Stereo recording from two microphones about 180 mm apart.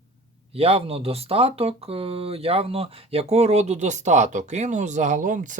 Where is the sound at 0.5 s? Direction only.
35° right (ahead or behind).